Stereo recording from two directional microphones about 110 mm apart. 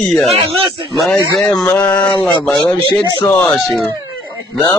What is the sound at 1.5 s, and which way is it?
Speech, 10° left (ahead or behind).